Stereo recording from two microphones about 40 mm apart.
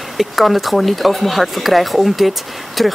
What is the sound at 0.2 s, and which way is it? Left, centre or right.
Speech, centre.